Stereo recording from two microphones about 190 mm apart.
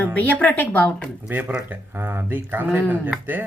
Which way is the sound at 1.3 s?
10° right (ahead or behind).